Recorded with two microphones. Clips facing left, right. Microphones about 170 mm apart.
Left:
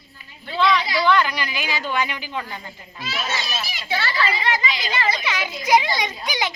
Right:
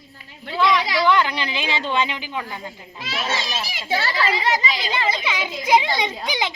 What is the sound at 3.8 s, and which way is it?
A woman's voice, 40° right (ahead or behind).